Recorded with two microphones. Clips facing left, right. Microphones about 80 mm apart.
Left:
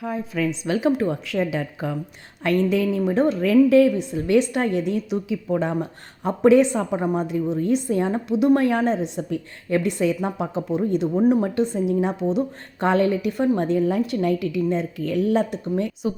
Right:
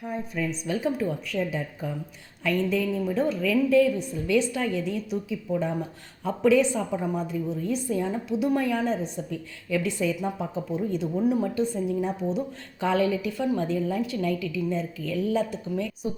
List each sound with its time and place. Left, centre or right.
0.0 s a woman's voice: left
2.4 s a woman's voice: left
11.1 s a woman's voice: left